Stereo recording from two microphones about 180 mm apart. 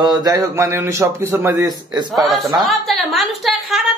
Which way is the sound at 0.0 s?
20° right (ahead or behind).